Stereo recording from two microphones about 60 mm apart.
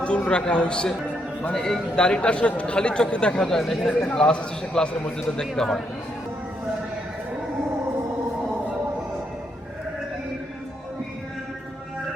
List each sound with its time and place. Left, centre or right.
0.0 s a man's voice: centre